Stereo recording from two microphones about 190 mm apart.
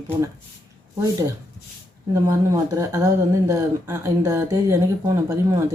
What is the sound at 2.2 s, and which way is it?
Speech, 15° right (ahead or behind).